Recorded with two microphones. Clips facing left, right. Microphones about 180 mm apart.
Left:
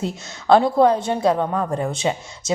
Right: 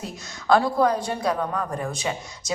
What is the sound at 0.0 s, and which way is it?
A woman's voice, 25° left (ahead or behind).